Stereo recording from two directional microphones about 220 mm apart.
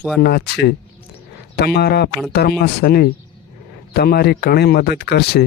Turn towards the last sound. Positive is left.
turn(degrees=45)  # may be behind; listen again after turning